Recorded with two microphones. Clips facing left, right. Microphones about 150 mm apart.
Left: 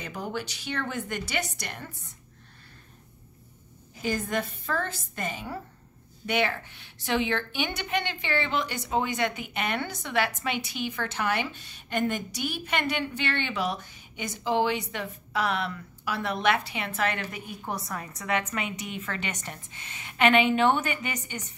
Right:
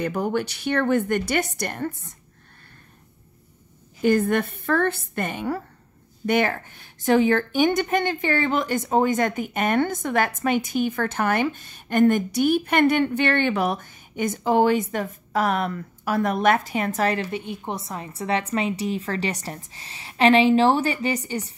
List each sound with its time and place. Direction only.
0.0 s a woman's voice: 55° right (ahead or behind)
4.0 s a woman's voice: 60° right (ahead or behind)
6.2 s a woman's voice: 45° right (ahead or behind)